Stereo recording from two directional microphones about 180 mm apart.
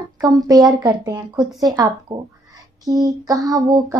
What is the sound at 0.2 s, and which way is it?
Speech, 20° right (ahead or behind).